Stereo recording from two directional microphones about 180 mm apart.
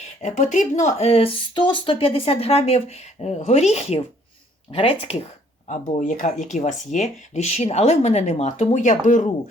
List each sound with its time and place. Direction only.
0.2 s speech: 40° left (ahead or behind)